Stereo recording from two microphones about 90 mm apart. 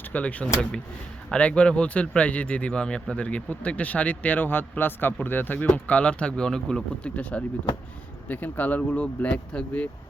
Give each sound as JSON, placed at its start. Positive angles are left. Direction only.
{"t": 0.1, "sound": "speech", "side_deg": 15}